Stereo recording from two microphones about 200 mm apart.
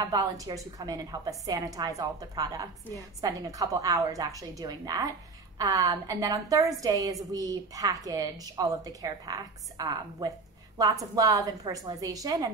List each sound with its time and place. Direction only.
0.1 s a woman's voice: 15° right (ahead or behind)